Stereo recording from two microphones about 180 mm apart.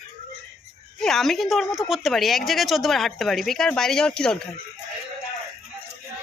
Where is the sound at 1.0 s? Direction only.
Centre (ahead or behind).